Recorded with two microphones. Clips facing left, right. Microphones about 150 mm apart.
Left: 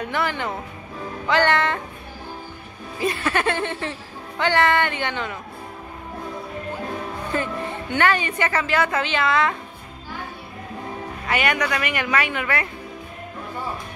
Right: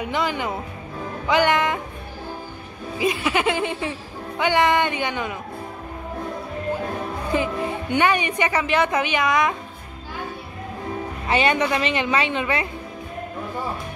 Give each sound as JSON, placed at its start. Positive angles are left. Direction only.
{"t": 0.0, "sound": "a woman's voice", "side_deg": -15}
{"t": 3.0, "sound": "a woman's voice", "side_deg": -10}
{"t": 7.3, "sound": "a woman's voice", "side_deg": -15}
{"t": 11.2, "sound": "a woman's voice", "side_deg": -25}